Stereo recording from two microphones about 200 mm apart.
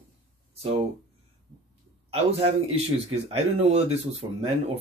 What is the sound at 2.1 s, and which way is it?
A man's voice, 30° right (ahead or behind).